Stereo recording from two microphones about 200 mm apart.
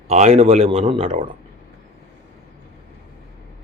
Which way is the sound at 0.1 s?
35° right (ahead or behind).